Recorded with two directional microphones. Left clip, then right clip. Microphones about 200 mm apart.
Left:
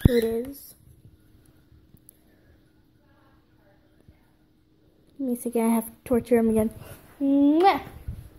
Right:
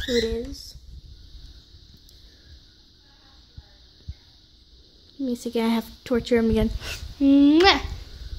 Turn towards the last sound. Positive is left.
turn(degrees=-25)  # may be behind; listen again after turning